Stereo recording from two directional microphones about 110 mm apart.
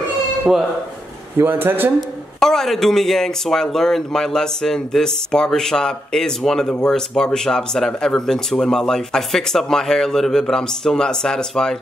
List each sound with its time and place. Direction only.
0.5 s speech: 5° right (ahead or behind)
1.4 s speech: 20° right (ahead or behind)
2.0 s speech: 5° left (ahead or behind)